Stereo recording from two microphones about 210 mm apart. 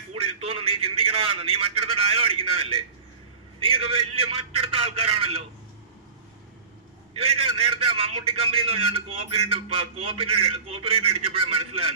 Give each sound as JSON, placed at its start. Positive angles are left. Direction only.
{"t": 0.1, "sound": "a man's voice", "side_deg": -25}
{"t": 7.1, "sound": "a man's voice", "side_deg": -25}